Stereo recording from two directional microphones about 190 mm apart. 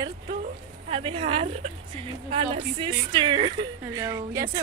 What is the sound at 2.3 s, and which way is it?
A woman's voice, 30° right (ahead or behind).